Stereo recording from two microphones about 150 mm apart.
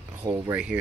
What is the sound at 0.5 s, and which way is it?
Speech, 10° right (ahead or behind).